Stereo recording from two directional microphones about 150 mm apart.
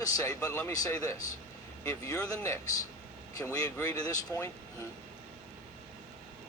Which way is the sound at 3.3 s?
20° left (ahead or behind).